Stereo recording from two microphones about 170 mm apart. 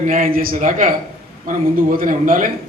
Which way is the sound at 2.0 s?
50° right (ahead or behind).